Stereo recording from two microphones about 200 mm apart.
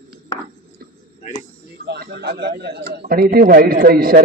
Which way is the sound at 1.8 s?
55° right (ahead or behind).